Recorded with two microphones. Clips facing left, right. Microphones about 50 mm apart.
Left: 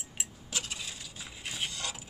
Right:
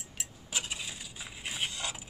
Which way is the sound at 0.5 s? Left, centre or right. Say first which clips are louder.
Right 2 dB; centre.